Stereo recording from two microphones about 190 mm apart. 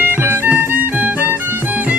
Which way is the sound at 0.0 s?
10° right (ahead or behind).